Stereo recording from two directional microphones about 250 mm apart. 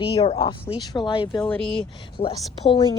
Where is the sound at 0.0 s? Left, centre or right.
Left.